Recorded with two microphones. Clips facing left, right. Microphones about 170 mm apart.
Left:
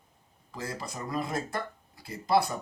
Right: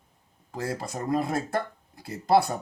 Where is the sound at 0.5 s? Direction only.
55° right (ahead or behind).